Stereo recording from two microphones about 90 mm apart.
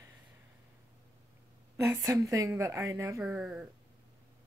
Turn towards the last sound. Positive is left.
turn(degrees=-10)  # may be behind; listen again after turning